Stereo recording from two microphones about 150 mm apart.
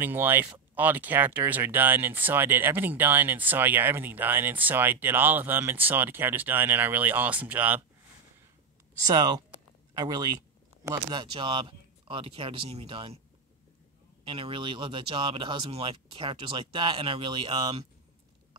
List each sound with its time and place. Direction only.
0.0 s speech: 15° right (ahead or behind)
9.0 s speech: 25° right (ahead or behind)
14.2 s speech: 35° right (ahead or behind)